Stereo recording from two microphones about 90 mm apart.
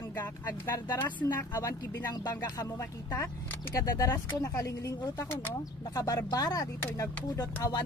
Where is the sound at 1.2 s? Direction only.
35° left (ahead or behind).